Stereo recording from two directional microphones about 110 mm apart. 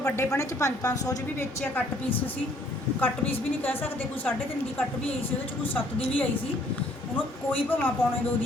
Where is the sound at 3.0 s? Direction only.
15° left (ahead or behind).